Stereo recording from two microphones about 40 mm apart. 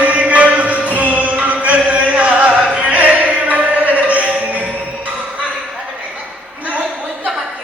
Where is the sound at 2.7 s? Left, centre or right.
Right.